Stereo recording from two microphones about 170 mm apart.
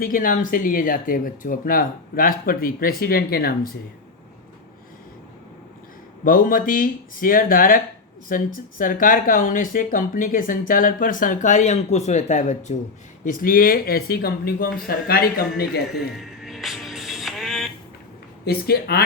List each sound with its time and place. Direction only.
0.0 s speech: 55° left (ahead or behind)
6.2 s speech: 55° left (ahead or behind)
16.0 s music: centre (ahead or behind)
18.4 s speech: 65° left (ahead or behind)